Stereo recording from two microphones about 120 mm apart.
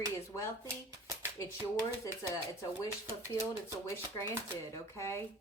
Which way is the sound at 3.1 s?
25° left (ahead or behind).